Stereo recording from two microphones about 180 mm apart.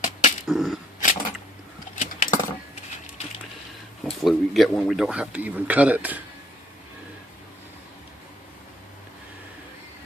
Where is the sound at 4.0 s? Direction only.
Centre (ahead or behind).